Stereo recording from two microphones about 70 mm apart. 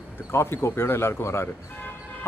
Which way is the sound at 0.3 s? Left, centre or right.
Left.